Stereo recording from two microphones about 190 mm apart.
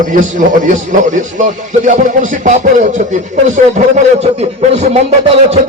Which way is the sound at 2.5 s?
40° right (ahead or behind).